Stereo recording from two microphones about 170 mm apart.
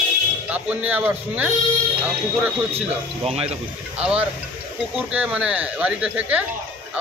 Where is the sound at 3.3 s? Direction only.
35° right (ahead or behind).